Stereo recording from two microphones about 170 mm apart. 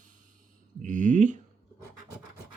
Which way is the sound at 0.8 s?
50° right (ahead or behind).